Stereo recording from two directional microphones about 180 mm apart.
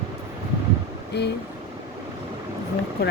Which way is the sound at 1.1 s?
65° left (ahead or behind).